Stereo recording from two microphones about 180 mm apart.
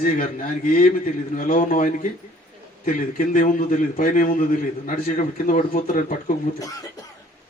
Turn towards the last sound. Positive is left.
turn(degrees=45)  # may be behind; listen again after turning